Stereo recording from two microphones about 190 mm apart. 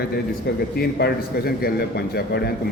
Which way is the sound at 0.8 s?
55° left (ahead or behind).